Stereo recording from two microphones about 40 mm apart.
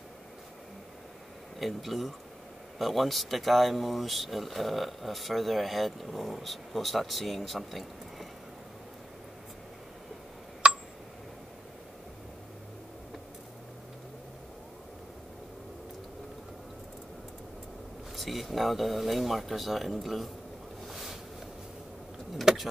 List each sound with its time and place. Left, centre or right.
1.6 s speech: centre
10.6 s a sound: right
18.1 s speech: centre
20.8 s boat: centre
22.5 s vehicle: centre